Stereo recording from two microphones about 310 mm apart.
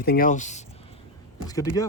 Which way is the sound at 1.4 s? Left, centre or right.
Centre.